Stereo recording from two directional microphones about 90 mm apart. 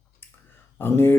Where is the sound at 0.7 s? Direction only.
25° left (ahead or behind).